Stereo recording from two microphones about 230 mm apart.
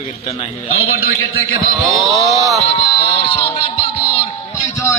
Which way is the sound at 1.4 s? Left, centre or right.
Left.